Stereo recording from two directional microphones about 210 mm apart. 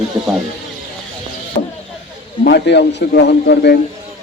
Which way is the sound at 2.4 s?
50° left (ahead or behind).